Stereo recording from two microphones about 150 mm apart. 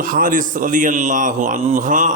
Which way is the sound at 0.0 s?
65° right (ahead or behind).